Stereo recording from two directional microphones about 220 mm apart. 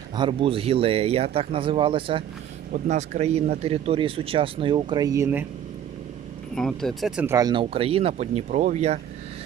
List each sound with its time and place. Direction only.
0.1 s speech: 20° right (ahead or behind)
6.5 s speech: centre (ahead or behind)
7.3 s speech: 20° right (ahead or behind)